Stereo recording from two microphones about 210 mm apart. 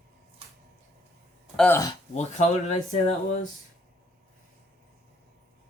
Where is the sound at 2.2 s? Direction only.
35° left (ahead or behind).